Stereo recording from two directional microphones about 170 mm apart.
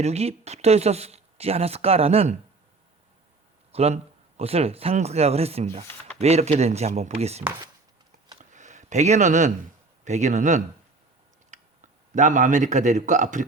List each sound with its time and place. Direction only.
0.0 s speech: 40° right (ahead or behind)
3.7 s speech: 40° right (ahead or behind)
8.5 s a sound: 45° right (ahead or behind)
10.0 s speech: 45° right (ahead or behind)